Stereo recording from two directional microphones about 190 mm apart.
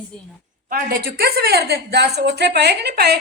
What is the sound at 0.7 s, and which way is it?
A woman's voice, 50° right (ahead or behind).